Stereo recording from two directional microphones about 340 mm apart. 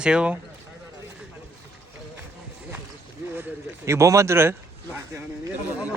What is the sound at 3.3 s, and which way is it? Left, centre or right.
A man's voice, centre.